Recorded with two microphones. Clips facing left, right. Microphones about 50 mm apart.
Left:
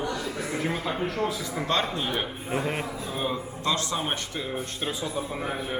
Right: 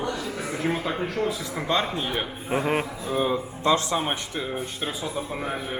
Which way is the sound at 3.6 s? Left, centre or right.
Right.